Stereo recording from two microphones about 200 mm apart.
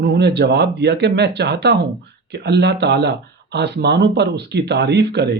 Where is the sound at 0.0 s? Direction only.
55° right (ahead or behind).